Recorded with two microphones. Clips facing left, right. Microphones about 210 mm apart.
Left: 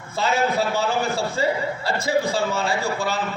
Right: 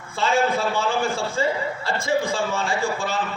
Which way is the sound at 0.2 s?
40° left (ahead or behind).